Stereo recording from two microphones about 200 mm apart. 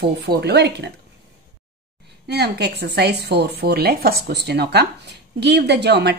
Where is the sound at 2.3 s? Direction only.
55° right (ahead or behind).